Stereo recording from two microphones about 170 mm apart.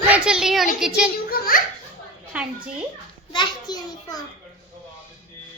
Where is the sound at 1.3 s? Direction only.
55° left (ahead or behind).